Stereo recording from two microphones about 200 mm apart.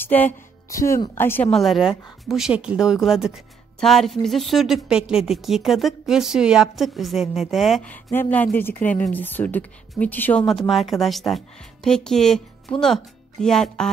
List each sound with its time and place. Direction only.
0.0 s a woman's voice: 10° left (ahead or behind)